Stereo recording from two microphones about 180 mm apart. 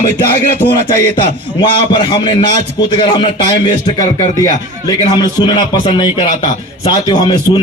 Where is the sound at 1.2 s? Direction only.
25° left (ahead or behind).